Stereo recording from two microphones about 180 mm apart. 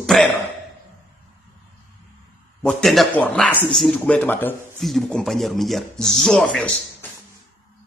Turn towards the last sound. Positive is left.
turn(degrees=0)  # may be behind; listen again after turning